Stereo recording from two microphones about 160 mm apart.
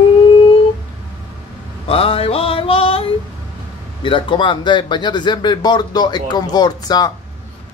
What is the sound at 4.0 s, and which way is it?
A man's voice, 30° left (ahead or behind).